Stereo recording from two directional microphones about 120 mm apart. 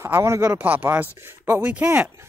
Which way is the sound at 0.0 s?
25° right (ahead or behind).